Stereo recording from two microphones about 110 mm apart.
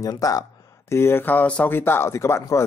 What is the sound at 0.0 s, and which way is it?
Speech, 35° left (ahead or behind).